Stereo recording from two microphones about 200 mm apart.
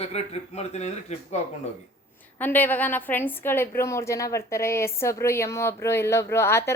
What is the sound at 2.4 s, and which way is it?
A woman's voice, 10° left (ahead or behind).